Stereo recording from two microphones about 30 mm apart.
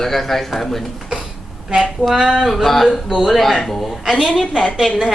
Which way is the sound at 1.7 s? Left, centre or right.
Centre.